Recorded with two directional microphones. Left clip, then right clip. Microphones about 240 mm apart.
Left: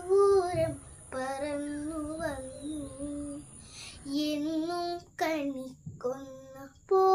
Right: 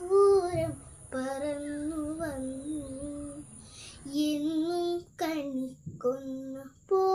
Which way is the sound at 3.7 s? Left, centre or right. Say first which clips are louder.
Right 1 dB; centre.